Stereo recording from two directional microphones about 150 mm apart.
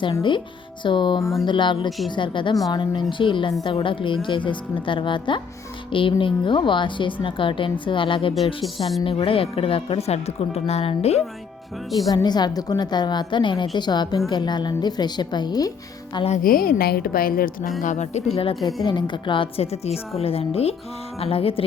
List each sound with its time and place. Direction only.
0.2 s a woman's voice: 30° left (ahead or behind)
11.9 s a woman's voice: 30° left (ahead or behind)
16.1 s speech: 45° left (ahead or behind)
16.4 s a woman's voice: 75° left (ahead or behind)
17.8 s a woman's voice: 50° left (ahead or behind)